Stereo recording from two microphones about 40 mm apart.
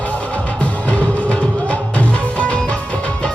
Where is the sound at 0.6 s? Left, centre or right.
Left.